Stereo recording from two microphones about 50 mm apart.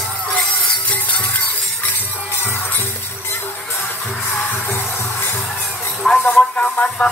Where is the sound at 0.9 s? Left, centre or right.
Left.